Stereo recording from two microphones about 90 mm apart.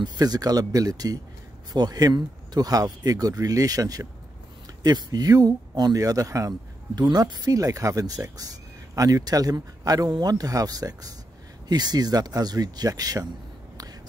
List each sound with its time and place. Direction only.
0.0 s speech: 50° right (ahead or behind)
7.0 s speech: 50° right (ahead or behind)